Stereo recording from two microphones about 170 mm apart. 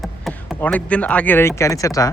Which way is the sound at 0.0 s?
Centre (ahead or behind).